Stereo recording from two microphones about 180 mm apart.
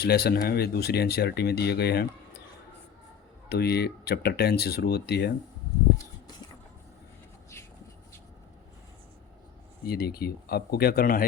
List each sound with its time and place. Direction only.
0.0 s speech: 60° left (ahead or behind)
3.5 s speech: 65° left (ahead or behind)
7.5 s a sound: 15° left (ahead or behind)
9.8 s speech: 60° left (ahead or behind)